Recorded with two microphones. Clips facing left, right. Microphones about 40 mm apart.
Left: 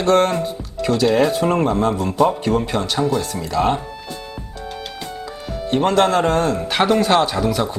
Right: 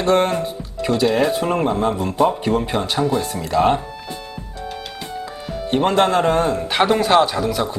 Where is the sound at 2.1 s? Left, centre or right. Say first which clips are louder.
Even; right.